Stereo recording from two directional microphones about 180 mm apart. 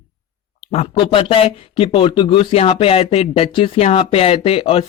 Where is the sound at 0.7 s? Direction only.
35° left (ahead or behind).